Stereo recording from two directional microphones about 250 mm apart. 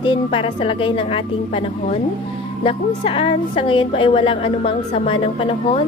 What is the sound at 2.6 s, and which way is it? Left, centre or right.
A woman's voice, left.